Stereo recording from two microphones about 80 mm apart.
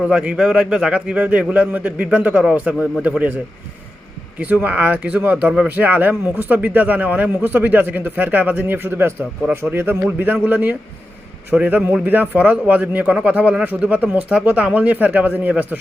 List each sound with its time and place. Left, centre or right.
0.0 s a man's voice: centre
4.4 s a man's voice: centre